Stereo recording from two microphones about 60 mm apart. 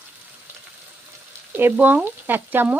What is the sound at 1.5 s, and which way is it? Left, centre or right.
Frying, right.